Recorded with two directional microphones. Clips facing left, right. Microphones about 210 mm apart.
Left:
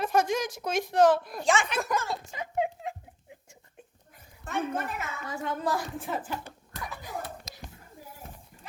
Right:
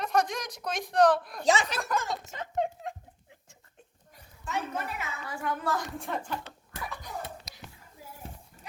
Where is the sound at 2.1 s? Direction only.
10° left (ahead or behind).